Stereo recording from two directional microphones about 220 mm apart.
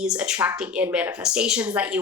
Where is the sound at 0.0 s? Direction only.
5° right (ahead or behind).